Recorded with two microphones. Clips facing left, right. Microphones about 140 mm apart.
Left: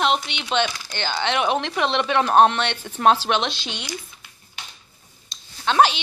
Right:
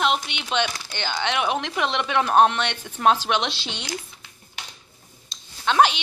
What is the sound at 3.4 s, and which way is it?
Speech, 25° right (ahead or behind).